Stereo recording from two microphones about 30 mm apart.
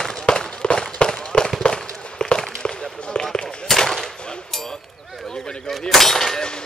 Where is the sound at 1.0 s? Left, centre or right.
Left.